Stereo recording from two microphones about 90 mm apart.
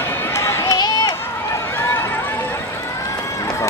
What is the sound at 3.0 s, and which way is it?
Run, 40° left (ahead or behind).